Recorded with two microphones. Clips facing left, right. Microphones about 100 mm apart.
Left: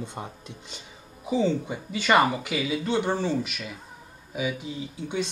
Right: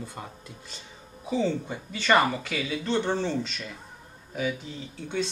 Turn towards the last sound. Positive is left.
turn(degrees=10)  # may be behind; listen again after turning